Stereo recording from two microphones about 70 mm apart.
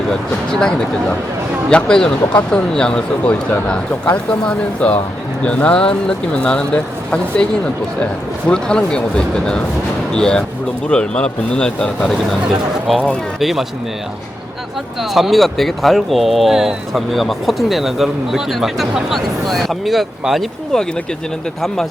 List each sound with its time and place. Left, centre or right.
0.6 s speech: centre
8.4 s speech: centre
12.9 s speech: centre
15.1 s speech: centre